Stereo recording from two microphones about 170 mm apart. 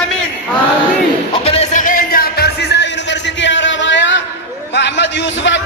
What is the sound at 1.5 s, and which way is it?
Music, 40° left (ahead or behind).